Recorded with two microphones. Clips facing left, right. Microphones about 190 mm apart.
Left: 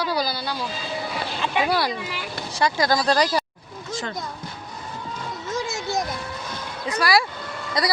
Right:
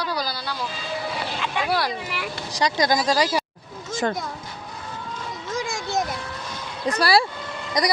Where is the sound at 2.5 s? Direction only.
15° right (ahead or behind).